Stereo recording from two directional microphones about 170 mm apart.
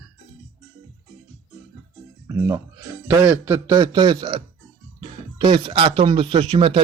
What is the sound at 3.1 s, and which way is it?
Speech, 15° right (ahead or behind).